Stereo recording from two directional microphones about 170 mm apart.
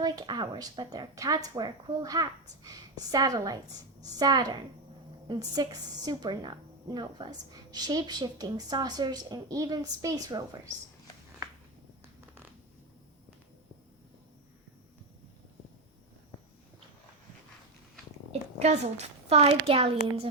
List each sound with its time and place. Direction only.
0.0 s a woman's voice: 25° right (ahead or behind)
18.3 s a child's voice: 40° right (ahead or behind)